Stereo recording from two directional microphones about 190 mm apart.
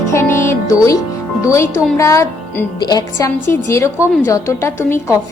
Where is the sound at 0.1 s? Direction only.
15° left (ahead or behind).